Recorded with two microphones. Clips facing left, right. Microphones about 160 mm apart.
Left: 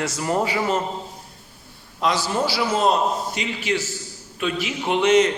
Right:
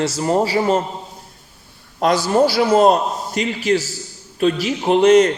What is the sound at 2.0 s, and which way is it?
A man's voice, 45° right (ahead or behind).